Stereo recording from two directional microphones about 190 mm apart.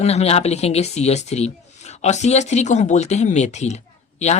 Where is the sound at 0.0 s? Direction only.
35° left (ahead or behind).